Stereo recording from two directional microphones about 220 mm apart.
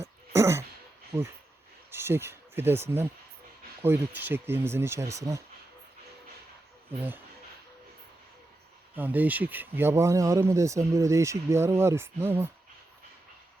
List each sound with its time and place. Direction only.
0.0 s throat clearing: 10° right (ahead or behind)
1.1 s speech: 20° right (ahead or behind)
9.0 s speech: 5° right (ahead or behind)